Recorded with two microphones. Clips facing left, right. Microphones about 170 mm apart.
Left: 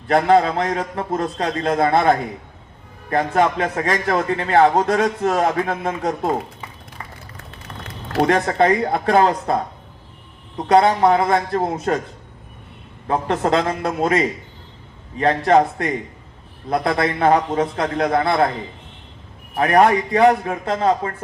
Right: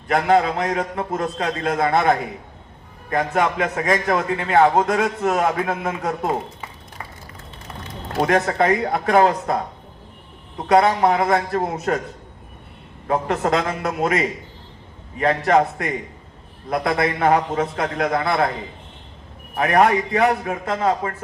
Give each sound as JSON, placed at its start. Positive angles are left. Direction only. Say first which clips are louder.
{"t": 0.1, "sound": "a man's voice", "louder": "left 2 dB", "side_deg": 35}
{"t": 8.3, "sound": "a man's voice", "louder": "left 1 dB", "side_deg": 35}
{"t": 10.7, "sound": "a man's voice", "louder": "left 2 dB", "side_deg": 30}
{"t": 13.1, "sound": "a man's voice", "louder": "left 1 dB", "side_deg": 30}
{"t": 19.5, "sound": "a man's voice", "louder": "left 2 dB", "side_deg": 30}